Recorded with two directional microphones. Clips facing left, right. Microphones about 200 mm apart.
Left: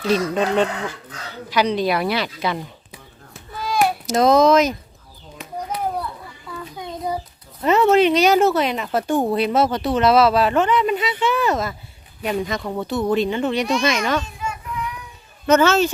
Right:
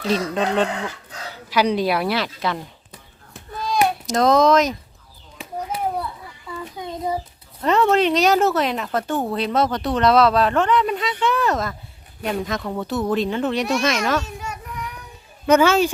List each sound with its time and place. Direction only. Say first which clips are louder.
0.1 s speech: left 2 dB; 5° left (ahead or behind)
1.3 s a sound: even; 5° right (ahead or behind)
7.6 s speech: left 2 dB; 5° left (ahead or behind)
14.3 s children playing: left 2 dB; 45° right (ahead or behind)
15.4 s speech: even; 10° right (ahead or behind)